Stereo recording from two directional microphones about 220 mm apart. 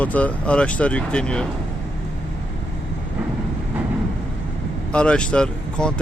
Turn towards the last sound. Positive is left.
turn(degrees=5)  # may be behind; listen again after turning